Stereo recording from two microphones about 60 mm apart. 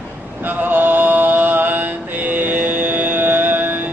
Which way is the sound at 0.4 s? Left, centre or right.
Right.